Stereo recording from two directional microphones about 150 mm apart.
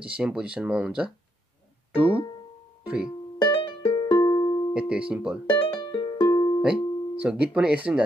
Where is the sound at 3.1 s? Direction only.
30° left (ahead or behind).